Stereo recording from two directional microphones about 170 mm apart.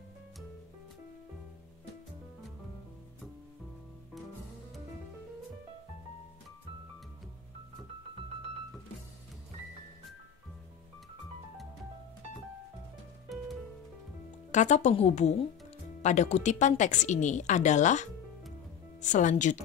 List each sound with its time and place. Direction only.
14.5 s a woman's voice: 45° left (ahead or behind)